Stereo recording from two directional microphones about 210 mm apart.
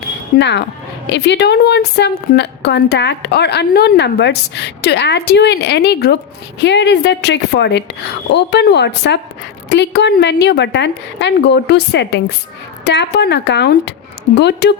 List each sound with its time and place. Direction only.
0.3 s a woman's voice: 55° left (ahead or behind)